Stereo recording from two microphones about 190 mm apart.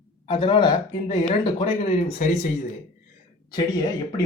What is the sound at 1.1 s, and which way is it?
Speech, 40° left (ahead or behind).